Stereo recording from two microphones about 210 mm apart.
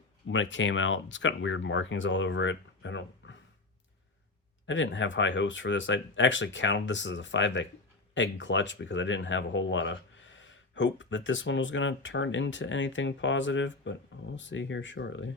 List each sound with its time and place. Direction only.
0.3 s speech: 60° left (ahead or behind)
4.6 s speech: 60° left (ahead or behind)